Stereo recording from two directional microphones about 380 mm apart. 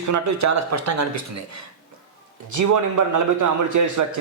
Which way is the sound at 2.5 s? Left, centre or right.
Right.